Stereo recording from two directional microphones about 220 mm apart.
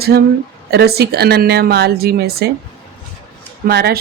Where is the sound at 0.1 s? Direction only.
45° right (ahead or behind).